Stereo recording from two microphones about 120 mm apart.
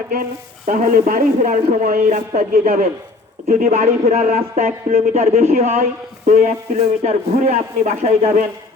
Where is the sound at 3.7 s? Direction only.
65° right (ahead or behind).